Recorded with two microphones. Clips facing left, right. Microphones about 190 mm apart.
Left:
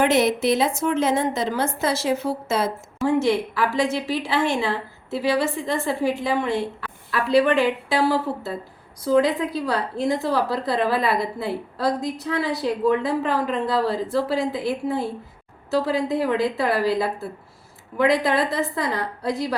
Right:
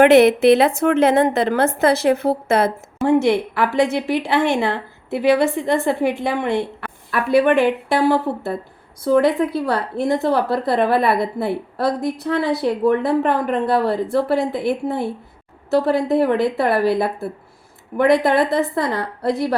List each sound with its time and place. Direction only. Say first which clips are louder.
0.0 s a woman's voice: right 8 dB; 60° right (ahead or behind)